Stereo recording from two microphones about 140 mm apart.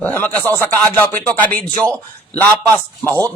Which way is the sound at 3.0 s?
15° left (ahead or behind).